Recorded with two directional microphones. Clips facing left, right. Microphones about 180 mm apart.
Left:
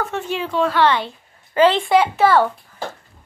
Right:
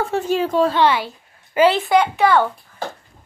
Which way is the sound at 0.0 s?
40° right (ahead or behind).